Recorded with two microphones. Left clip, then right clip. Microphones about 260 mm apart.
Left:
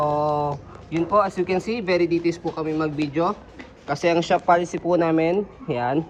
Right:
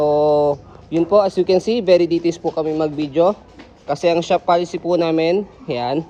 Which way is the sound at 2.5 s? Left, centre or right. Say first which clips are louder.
Right 5 dB; right.